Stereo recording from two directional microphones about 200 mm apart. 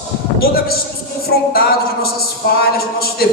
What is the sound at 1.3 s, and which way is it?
A man's voice, 50° left (ahead or behind).